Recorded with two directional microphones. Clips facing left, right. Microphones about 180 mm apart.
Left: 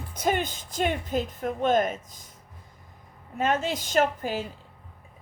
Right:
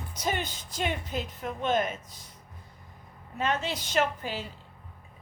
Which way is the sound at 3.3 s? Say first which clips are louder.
Left 4 dB; 45° left (ahead or behind).